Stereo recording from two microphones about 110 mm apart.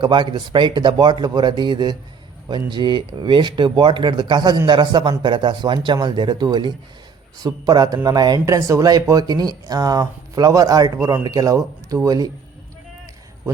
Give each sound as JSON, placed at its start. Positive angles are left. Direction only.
{"t": 0.0, "sound": "speech", "side_deg": -45}